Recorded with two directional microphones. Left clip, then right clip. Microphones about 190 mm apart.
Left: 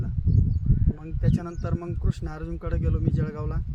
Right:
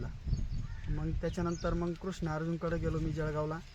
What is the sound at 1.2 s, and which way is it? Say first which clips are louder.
Speech: left 3 dB; 25° left (ahead or behind).